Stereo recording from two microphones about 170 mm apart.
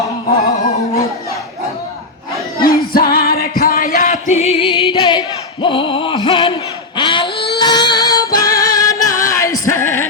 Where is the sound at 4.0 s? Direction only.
40° left (ahead or behind).